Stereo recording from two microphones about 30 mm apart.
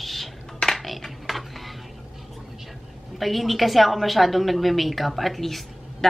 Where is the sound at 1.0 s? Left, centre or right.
Centre.